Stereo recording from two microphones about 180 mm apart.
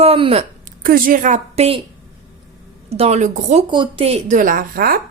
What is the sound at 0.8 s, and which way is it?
Speech, 50° right (ahead or behind).